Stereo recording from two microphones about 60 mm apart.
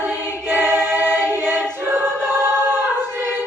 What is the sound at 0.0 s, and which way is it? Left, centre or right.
Choir, right.